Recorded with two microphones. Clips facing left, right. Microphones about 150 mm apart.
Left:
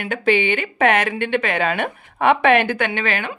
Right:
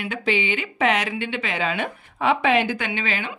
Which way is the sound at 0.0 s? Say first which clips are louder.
Left 5 dB; 55° left (ahead or behind).